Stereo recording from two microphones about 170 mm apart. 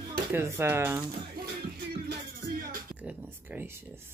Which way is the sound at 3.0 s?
10° right (ahead or behind).